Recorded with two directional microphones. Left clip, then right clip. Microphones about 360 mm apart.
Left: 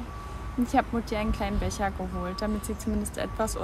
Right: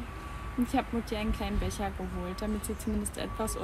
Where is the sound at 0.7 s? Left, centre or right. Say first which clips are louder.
Left 7 dB; centre.